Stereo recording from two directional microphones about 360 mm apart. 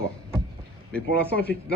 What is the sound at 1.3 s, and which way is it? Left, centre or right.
Speech, left.